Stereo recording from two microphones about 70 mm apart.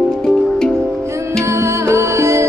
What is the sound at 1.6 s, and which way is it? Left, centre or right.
Music, right.